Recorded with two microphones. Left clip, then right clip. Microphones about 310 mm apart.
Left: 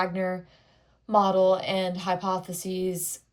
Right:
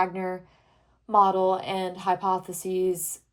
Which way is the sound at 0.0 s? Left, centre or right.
Centre.